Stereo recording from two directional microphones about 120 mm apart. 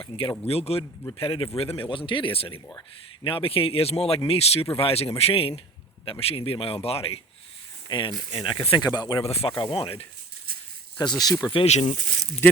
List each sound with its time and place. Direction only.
0.0 s a man's voice: 50° left (ahead or behind)
7.9 s speech: 40° left (ahead or behind)
9.2 s a man's voice: 55° left (ahead or behind)
9.6 s speech: 40° left (ahead or behind)
10.9 s speech: 35° left (ahead or behind)
11.5 s a man's voice: 60° left (ahead or behind)